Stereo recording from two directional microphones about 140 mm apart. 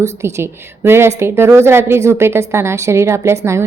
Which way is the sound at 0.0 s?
20° right (ahead or behind).